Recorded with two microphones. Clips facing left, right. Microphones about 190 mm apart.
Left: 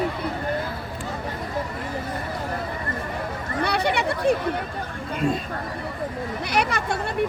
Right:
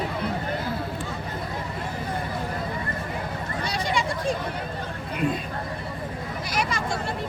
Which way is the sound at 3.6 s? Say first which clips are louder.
Left 5 dB; 65° left (ahead or behind).